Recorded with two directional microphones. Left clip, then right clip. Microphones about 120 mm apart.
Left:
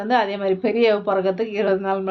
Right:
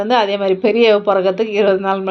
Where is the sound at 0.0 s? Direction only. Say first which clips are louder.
Right 5 dB; 20° right (ahead or behind).